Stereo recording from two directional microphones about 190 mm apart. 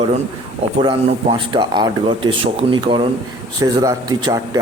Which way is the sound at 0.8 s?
25° right (ahead or behind).